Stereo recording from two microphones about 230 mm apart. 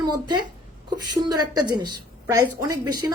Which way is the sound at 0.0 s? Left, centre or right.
Centre.